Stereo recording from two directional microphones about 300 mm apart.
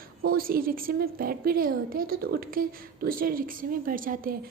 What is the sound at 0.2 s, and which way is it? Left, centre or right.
A woman's voice, right.